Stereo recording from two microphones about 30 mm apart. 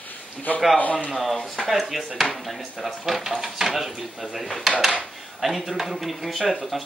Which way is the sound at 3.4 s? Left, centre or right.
Centre.